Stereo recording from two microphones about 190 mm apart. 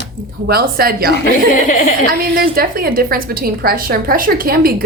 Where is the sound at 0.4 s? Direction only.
55° right (ahead or behind).